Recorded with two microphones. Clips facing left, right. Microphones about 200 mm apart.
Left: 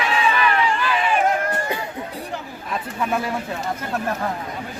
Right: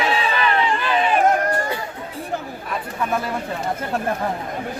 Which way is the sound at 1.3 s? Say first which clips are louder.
Right 3 dB; 40° right (ahead or behind).